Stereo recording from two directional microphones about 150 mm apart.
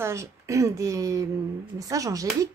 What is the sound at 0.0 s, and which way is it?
Speech, 20° right (ahead or behind).